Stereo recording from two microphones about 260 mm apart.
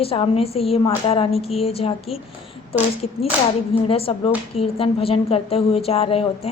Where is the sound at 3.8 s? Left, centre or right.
Left.